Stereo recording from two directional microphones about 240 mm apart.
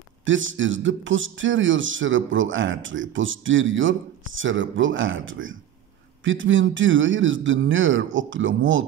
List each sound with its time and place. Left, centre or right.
0.2 s a man's voice: right